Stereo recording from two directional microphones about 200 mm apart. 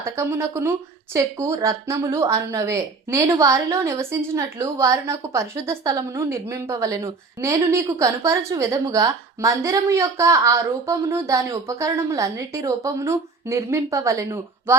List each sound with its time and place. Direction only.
0.0 s a woman's voice: 10° right (ahead or behind)